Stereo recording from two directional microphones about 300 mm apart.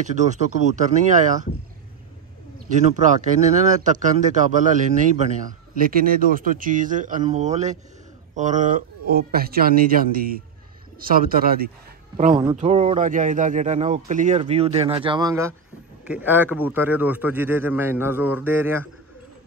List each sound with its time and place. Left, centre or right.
0.0 s speech: right
2.7 s a man's voice: right; by 18.9 s centre